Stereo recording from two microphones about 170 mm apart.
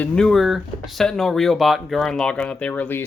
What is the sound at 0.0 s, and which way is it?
Speech, 5° left (ahead or behind).